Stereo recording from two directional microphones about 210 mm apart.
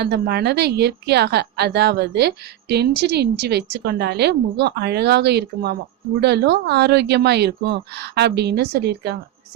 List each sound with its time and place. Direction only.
0.0 s a woman's voice: 50° right (ahead or behind)